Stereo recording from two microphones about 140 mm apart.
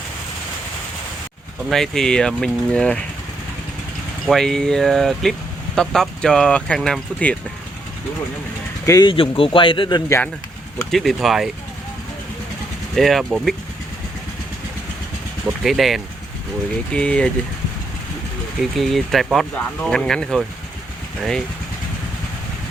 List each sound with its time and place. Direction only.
1.7 s speech: 5° left (ahead or behind)
4.3 s speech: 5° left (ahead or behind)
8.9 s speech: 30° left (ahead or behind)
10.9 s speech: centre (ahead or behind)
13.0 s speech: centre (ahead or behind)
15.6 s speech: centre (ahead or behind)
18.8 s speech: centre (ahead or behind)